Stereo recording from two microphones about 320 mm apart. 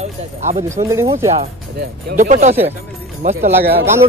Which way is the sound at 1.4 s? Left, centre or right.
Right.